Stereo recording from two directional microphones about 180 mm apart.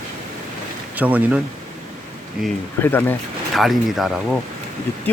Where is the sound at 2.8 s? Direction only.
10° left (ahead or behind).